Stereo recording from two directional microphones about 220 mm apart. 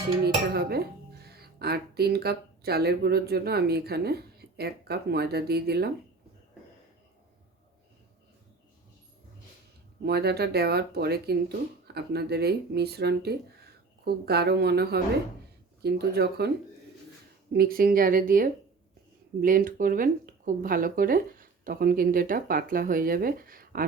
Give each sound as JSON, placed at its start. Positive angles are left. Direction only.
{"t": 0.5, "sound": "speech", "side_deg": -45}
{"t": 10.0, "sound": "speech", "side_deg": -45}
{"t": 17.5, "sound": "speech", "side_deg": -45}